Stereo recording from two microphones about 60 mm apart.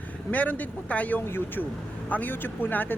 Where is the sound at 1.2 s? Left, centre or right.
Left.